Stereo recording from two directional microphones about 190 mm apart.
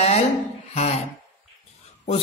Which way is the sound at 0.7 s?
35° left (ahead or behind).